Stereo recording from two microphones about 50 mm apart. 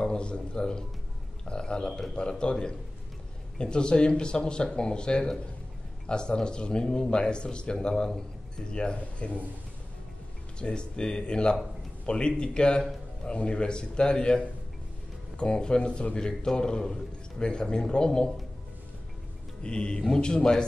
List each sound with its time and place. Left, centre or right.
0.0 s a man's voice: centre
10.6 s a man's voice: centre
19.6 s speech: centre